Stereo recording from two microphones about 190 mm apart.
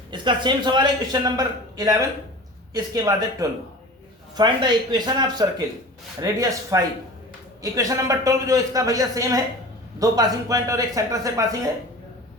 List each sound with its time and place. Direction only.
0.1 s a man's voice: 25° right (ahead or behind)